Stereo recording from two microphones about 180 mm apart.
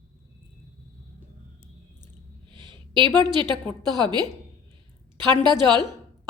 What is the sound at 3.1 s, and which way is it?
A woman's voice, 25° right (ahead or behind).